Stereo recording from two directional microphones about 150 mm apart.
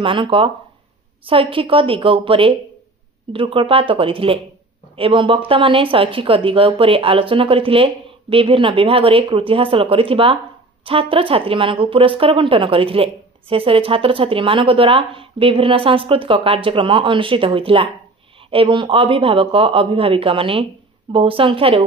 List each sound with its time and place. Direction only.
0.0 s a woman's voice: 35° right (ahead or behind)